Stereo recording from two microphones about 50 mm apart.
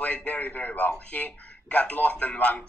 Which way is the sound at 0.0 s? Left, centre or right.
Left.